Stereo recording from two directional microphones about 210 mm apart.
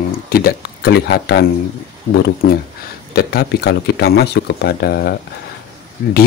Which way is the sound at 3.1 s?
50° left (ahead or behind).